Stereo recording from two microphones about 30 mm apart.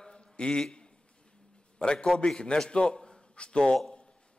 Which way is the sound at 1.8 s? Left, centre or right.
Left.